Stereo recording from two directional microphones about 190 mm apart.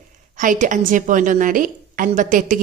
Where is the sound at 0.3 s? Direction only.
45° right (ahead or behind).